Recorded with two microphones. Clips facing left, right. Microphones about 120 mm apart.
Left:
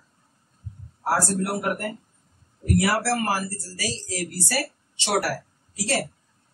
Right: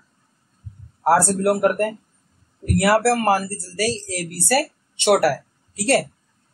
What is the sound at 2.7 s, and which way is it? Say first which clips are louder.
Speech: right 6 dB; 60° right (ahead or behind).